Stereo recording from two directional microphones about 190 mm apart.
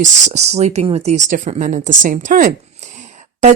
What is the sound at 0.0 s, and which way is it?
Speech, 35° right (ahead or behind).